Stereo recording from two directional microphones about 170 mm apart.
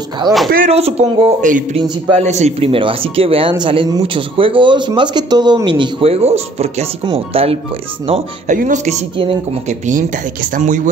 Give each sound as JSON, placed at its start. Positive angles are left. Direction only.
{"t": 0.2, "sound": "a man's voice", "side_deg": -25}
{"t": 0.7, "sound": "speech", "side_deg": -35}
{"t": 1.8, "sound": "a man's voice", "side_deg": -30}
{"t": 2.2, "sound": "speech", "side_deg": -40}
{"t": 8.5, "sound": "speech", "side_deg": -50}
{"t": 9.1, "sound": "speech", "side_deg": -30}
{"t": 9.7, "sound": "speech", "side_deg": -45}